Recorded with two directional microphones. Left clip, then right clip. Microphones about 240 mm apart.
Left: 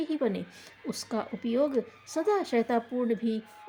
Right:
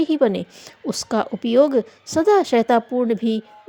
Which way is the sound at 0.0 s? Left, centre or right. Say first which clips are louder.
Right 12 dB; right.